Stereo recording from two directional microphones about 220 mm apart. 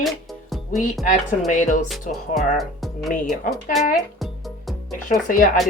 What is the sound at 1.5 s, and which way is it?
Speech, 35° left (ahead or behind).